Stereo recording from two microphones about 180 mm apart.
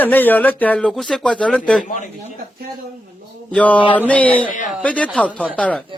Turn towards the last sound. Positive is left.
turn(degrees=5)  # may be behind; listen again after turning